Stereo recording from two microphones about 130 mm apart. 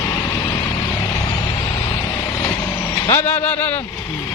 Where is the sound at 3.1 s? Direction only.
15° left (ahead or behind).